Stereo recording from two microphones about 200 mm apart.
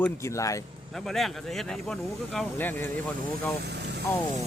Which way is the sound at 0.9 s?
Centre (ahead or behind).